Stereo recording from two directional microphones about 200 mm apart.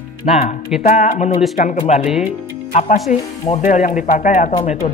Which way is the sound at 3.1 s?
40° left (ahead or behind).